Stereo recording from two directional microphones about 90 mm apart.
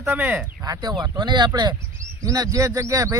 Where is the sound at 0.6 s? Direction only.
50° right (ahead or behind).